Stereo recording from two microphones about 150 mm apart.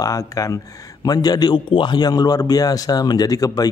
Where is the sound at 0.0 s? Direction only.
20° left (ahead or behind).